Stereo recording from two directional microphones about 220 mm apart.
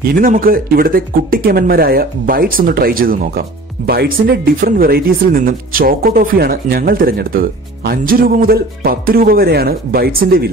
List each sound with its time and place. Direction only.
0.0 s speech: 40° right (ahead or behind)